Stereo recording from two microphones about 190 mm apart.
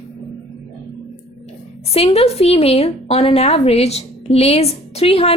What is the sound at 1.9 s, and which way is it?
A woman's voice, 30° left (ahead or behind).